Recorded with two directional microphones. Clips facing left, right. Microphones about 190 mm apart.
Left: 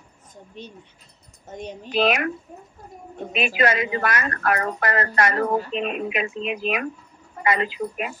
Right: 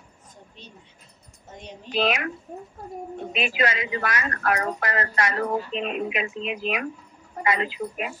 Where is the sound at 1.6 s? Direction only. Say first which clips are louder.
Left 3 dB; 50° left (ahead or behind).